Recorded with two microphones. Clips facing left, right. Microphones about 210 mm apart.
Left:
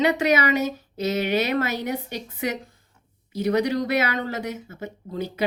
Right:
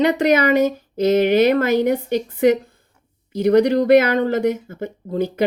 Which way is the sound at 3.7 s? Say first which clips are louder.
Right 10 dB; 50° right (ahead or behind).